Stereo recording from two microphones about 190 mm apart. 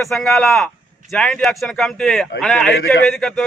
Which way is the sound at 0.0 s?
Centre (ahead or behind).